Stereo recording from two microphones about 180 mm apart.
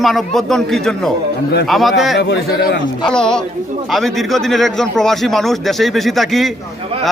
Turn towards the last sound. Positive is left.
turn(degrees=0)  # may be behind; listen again after turning